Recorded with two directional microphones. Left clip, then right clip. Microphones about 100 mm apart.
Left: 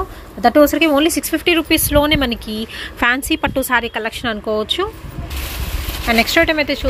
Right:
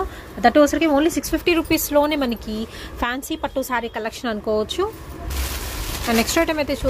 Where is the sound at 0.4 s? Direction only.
30° left (ahead or behind).